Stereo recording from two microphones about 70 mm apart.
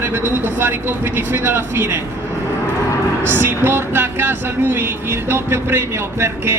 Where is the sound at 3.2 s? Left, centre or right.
Right.